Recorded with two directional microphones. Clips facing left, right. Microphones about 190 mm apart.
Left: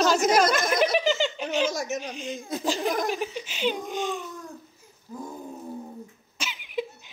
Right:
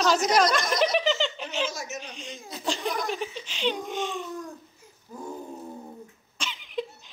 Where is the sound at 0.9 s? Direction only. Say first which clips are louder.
Left 1 dB; centre (ahead or behind).